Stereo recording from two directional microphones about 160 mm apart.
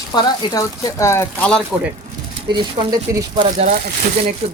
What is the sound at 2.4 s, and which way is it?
Speech, 25° right (ahead or behind).